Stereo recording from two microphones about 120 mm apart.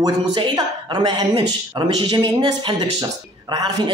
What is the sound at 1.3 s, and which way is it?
Speech, 50° right (ahead or behind).